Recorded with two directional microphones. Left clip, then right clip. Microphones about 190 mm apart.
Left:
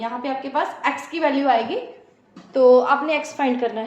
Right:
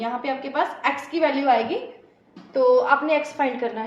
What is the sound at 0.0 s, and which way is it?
A woman's voice, 30° left (ahead or behind).